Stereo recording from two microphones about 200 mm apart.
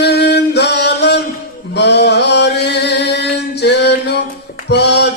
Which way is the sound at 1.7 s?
60° left (ahead or behind).